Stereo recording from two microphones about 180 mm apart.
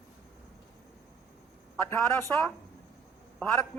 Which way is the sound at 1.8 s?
15° left (ahead or behind).